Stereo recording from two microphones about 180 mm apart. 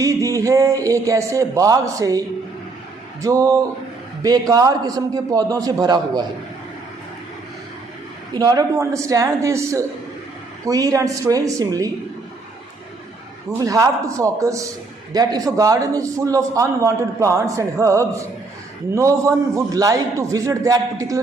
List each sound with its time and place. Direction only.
0.0 s a man's voice: 20° right (ahead or behind)
8.3 s a man's voice: 20° right (ahead or behind)
13.5 s a man's voice: 20° right (ahead or behind)